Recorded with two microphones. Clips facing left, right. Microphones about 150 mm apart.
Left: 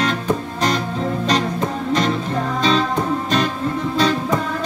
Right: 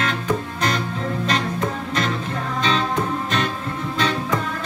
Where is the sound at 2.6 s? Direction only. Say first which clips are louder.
Left 3 dB; 35° left (ahead or behind).